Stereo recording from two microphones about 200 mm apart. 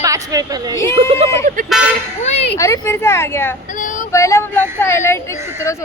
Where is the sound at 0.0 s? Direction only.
15° right (ahead or behind).